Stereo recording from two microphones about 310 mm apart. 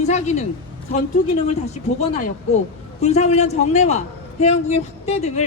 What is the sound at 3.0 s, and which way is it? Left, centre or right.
Speech, left.